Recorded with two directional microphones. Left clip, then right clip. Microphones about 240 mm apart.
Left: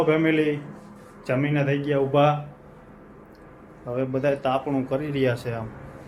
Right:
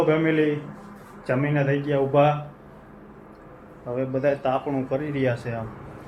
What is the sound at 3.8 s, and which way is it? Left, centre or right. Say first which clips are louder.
A man's voice: right 1 dB; centre.